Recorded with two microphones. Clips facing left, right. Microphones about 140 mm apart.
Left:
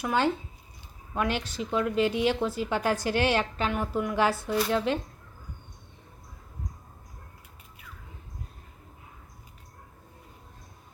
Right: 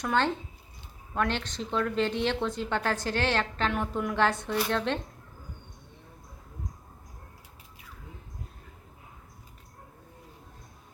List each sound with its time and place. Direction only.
0.0 s a woman's voice: 10° left (ahead or behind)